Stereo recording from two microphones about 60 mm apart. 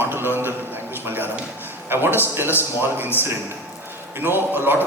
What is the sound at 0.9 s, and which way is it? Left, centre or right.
A man's voice, right.